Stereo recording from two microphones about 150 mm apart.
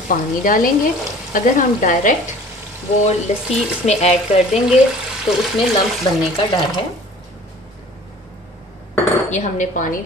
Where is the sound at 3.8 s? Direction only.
45° left (ahead or behind).